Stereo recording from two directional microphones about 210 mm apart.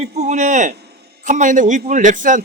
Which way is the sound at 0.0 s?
30° right (ahead or behind).